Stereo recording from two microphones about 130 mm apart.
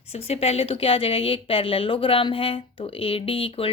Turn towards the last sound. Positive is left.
turn(degrees=45)  # may be behind; listen again after turning